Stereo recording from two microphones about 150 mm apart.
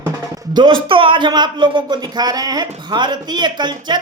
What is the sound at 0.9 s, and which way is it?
Speech, 35° right (ahead or behind).